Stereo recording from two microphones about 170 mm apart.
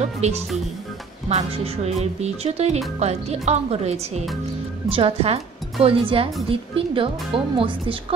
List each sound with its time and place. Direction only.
0.0 s a woman's voice: 40° right (ahead or behind)